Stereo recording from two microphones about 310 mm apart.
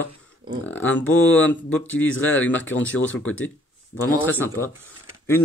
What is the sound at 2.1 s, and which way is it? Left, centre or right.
Speech, left.